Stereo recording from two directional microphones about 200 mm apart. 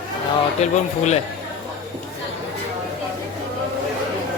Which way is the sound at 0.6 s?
35° left (ahead or behind).